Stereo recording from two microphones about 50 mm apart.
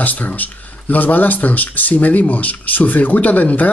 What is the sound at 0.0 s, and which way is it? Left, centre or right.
Speech, left.